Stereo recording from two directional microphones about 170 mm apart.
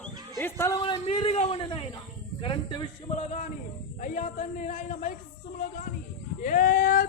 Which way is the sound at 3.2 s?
50° left (ahead or behind).